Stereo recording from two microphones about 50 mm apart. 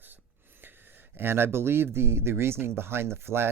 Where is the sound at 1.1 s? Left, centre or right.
Right.